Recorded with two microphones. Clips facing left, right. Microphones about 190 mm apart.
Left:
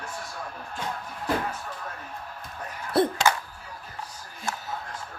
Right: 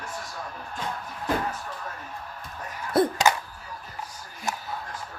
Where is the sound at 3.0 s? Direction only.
30° left (ahead or behind).